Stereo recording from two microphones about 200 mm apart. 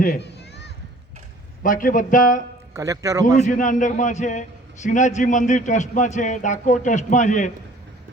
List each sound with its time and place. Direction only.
0.0 s a sound: 50° left (ahead or behind)
1.6 s a man's voice: 40° left (ahead or behind)
2.7 s a man's voice: 15° right (ahead or behind)
3.4 s a man's voice: 40° left (ahead or behind)